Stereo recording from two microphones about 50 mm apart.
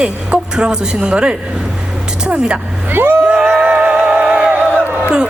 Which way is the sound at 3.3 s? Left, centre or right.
Right.